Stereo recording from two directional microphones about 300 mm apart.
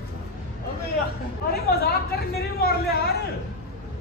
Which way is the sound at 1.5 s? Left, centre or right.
Left.